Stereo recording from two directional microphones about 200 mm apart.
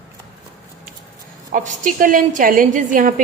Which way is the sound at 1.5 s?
40° right (ahead or behind).